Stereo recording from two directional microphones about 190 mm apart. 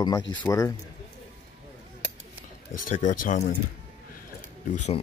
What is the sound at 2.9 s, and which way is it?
Speech, 40° left (ahead or behind).